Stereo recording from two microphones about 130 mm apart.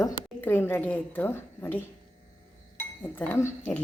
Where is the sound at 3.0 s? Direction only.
15° left (ahead or behind).